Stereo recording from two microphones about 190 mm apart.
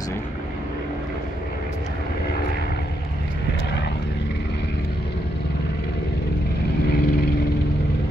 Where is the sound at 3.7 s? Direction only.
60° left (ahead or behind).